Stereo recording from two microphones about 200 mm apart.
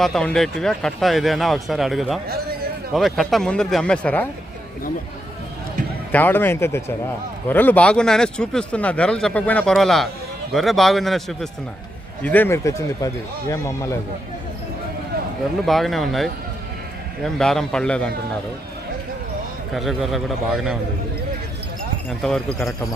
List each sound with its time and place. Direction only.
0.0 s speech: 5° left (ahead or behind)
2.3 s a sound: 50° right (ahead or behind)
2.9 s speech: centre (ahead or behind)
6.1 s speech: 10° left (ahead or behind)
15.6 s speech: centre (ahead or behind)
19.7 s speech: centre (ahead or behind)
22.2 s speech: centre (ahead or behind)